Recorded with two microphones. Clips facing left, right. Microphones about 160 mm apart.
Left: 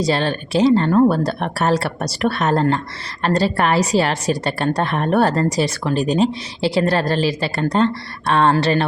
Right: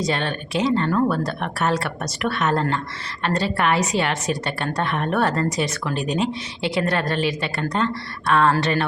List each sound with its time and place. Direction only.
0.0 s a woman's voice: 35° left (ahead or behind)